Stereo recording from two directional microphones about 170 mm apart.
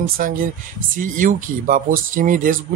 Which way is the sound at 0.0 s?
55° right (ahead or behind).